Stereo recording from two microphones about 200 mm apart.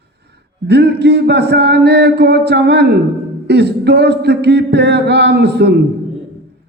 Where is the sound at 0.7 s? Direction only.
55° right (ahead or behind).